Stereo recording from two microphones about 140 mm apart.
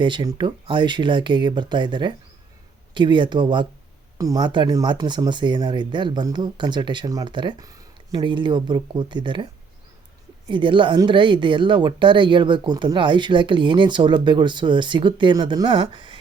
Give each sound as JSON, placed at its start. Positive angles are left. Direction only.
{"t": 0.0, "sound": "speech", "side_deg": -35}